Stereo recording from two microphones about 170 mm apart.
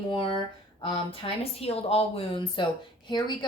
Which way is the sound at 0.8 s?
35° left (ahead or behind).